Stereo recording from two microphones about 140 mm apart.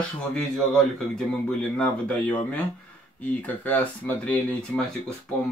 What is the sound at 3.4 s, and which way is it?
Speech, 10° left (ahead or behind).